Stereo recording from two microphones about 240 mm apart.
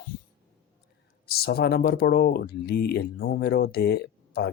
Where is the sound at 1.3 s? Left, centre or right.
Left.